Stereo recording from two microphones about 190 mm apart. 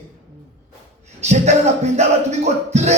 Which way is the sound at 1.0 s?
35° right (ahead or behind).